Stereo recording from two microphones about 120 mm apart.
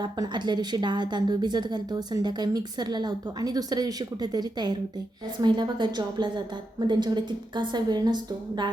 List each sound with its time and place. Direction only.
0.0 s a woman's voice: 40° right (ahead or behind)